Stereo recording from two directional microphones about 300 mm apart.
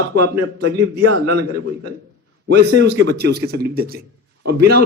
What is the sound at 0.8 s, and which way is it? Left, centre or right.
Speech, right.